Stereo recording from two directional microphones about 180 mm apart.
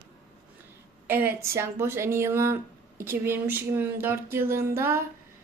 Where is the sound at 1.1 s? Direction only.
10° right (ahead or behind).